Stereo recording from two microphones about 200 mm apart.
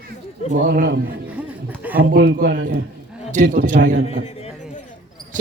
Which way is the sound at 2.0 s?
50° right (ahead or behind).